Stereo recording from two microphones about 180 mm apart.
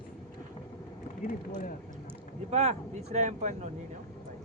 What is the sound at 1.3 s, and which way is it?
Speech, 50° left (ahead or behind).